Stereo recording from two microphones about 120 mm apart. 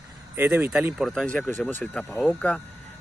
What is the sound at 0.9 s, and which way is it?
Speech, centre (ahead or behind).